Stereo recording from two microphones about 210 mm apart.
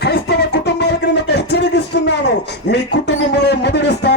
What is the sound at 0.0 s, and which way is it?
Music, 50° left (ahead or behind).